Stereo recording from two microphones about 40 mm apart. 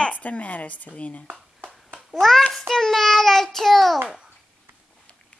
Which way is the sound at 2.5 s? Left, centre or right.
Centre.